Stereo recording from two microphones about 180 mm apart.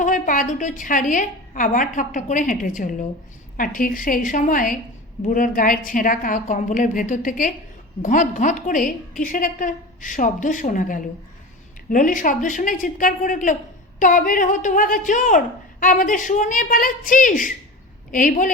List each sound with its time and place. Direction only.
0.0 s a woman's voice: 45° left (ahead or behind)